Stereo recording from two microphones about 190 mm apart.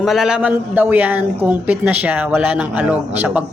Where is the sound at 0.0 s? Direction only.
Centre (ahead or behind).